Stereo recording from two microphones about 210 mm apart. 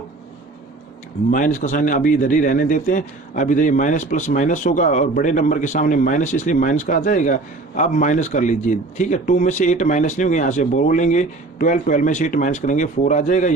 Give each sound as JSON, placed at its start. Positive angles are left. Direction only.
{"t": 1.3, "sound": "a man's voice", "side_deg": 35}